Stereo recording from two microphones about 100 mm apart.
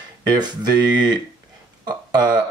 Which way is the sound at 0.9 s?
45° right (ahead or behind).